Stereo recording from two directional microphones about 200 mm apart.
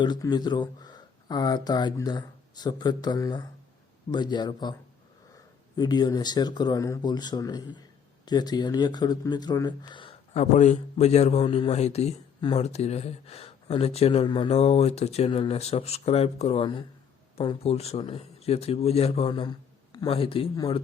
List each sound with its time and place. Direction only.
0.0 s speech: 20° left (ahead or behind)
5.7 s speech: 20° left (ahead or behind)